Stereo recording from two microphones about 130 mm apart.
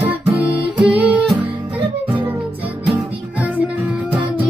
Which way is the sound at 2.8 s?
10° right (ahead or behind).